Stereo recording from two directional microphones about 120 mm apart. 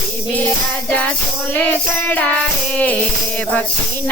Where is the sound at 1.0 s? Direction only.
10° left (ahead or behind).